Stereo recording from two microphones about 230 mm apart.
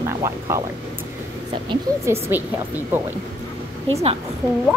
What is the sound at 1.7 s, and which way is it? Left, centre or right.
Speech, centre.